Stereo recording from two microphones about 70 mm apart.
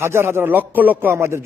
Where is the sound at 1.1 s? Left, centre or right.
Right.